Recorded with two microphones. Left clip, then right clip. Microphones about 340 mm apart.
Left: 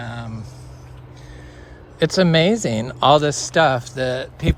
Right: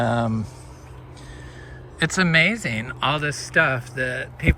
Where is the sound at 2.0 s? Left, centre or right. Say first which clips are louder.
Left 2 dB; centre.